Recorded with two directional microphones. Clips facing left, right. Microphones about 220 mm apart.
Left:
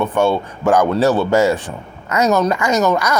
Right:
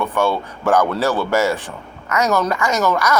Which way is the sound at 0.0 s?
20° left (ahead or behind).